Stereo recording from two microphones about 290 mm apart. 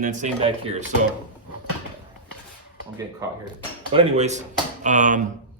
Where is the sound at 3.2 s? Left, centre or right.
Centre.